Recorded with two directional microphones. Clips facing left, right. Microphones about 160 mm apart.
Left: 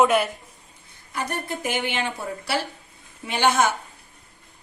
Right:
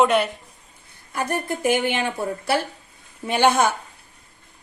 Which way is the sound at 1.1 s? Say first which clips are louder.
Right 4 dB; 55° right (ahead or behind).